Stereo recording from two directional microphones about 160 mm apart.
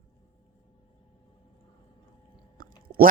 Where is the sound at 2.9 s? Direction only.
60° right (ahead or behind).